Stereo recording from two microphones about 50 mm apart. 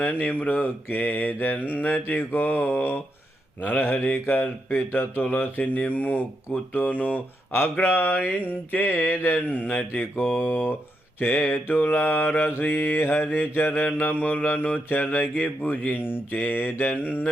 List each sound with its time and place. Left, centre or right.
0.0 s mantra: left
7.5 s mantra: left
12.5 s mantra: left